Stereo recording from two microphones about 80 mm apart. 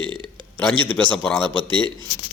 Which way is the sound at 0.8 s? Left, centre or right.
Centre.